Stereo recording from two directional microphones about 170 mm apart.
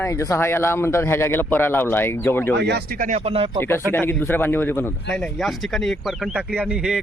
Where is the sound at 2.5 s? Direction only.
80° right; by 3.1 s 60° right (ahead or behind).